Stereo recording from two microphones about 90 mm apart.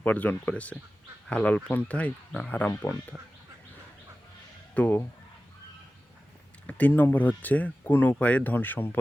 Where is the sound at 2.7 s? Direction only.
35° left (ahead or behind).